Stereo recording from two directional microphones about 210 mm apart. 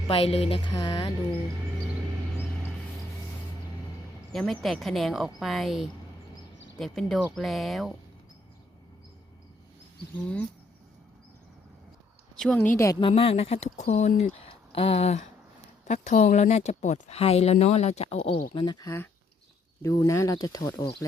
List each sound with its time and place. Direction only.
0.1 s speech: 30° left (ahead or behind)
4.3 s speech: centre (ahead or behind)
12.4 s speech: 5° left (ahead or behind)
12.7 s speech: 15° left (ahead or behind); by 14.3 s 40° left (ahead or behind)
14.4 s a sound: 25° left (ahead or behind)
15.9 s speech: 35° left (ahead or behind); by 20.9 s 20° left (ahead or behind)